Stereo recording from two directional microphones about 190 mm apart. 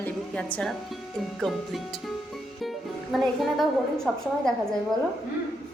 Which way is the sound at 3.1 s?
Centre (ahead or behind).